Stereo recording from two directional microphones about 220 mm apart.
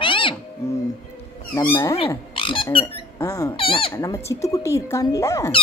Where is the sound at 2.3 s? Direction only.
25° left (ahead or behind).